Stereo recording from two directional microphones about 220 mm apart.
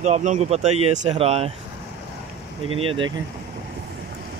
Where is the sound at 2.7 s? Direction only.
25° right (ahead or behind).